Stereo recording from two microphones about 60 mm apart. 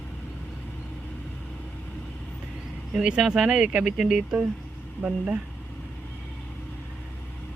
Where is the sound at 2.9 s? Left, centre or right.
Centre.